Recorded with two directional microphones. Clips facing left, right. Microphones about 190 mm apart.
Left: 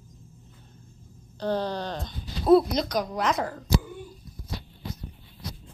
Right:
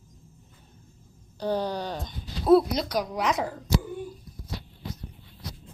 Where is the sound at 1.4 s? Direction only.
10° right (ahead or behind).